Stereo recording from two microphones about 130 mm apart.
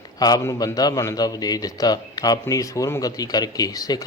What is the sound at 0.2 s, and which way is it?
A man's voice, 30° left (ahead or behind).